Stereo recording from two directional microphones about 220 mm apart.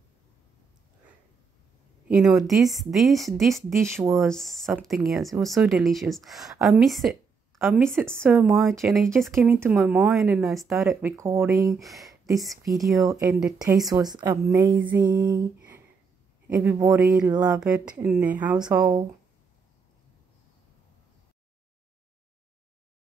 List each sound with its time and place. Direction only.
2.0 s speech: centre (ahead or behind)
3.8 s a woman's voice: 10° right (ahead or behind)
4.1 s a woman's voice: centre (ahead or behind); by 11.7 s 15° right (ahead or behind)
11.8 s speech: centre (ahead or behind)
12.3 s a woman's voice: 15° right (ahead or behind)
15.0 s a sound: 20° right (ahead or behind)
16.4 s a woman's voice: 10° right (ahead or behind)
18.7 s a woman's voice: 20° right (ahead or behind)